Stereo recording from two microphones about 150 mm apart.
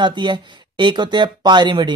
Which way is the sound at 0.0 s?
30° right (ahead or behind).